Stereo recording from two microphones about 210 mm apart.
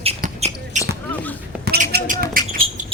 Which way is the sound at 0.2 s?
35° right (ahead or behind).